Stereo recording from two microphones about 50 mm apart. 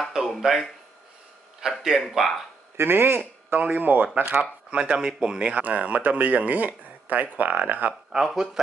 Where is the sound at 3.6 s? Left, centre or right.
Right.